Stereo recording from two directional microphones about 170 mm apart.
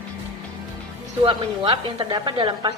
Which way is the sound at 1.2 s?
30° right (ahead or behind).